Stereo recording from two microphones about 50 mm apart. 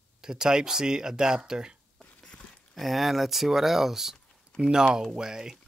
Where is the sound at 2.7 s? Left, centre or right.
Centre.